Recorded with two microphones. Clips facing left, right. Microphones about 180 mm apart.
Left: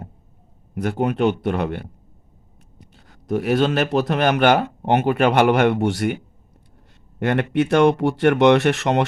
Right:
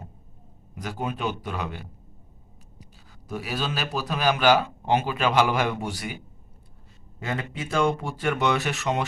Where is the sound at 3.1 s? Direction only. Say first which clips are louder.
Left 12 dB; 65° left (ahead or behind).